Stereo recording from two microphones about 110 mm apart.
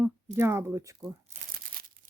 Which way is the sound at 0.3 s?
25° right (ahead or behind).